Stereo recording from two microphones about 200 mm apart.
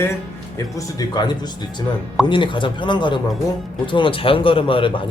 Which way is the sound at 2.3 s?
25° left (ahead or behind).